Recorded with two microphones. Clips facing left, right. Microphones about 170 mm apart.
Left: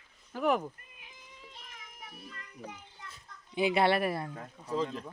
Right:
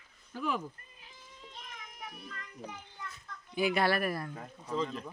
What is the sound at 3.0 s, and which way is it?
A child's voice, 25° left (ahead or behind).